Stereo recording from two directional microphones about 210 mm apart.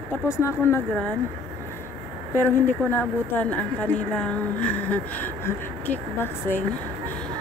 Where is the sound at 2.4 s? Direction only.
10° left (ahead or behind).